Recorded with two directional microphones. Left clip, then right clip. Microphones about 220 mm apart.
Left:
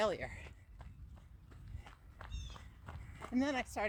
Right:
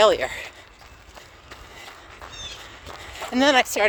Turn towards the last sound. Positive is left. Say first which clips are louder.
# right 19 dB
turn(degrees=-20)  # may be behind; listen again after turning